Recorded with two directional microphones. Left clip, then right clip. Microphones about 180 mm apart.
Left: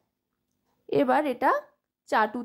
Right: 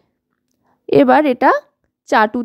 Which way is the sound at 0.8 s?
40° right (ahead or behind).